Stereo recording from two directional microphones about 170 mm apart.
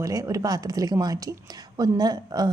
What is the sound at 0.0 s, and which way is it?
A woman's voice, 20° right (ahead or behind).